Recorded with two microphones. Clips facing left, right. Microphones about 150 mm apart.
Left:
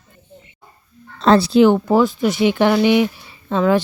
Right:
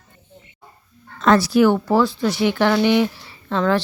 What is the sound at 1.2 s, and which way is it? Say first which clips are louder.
Speech: left 3 dB; 30° left (ahead or behind).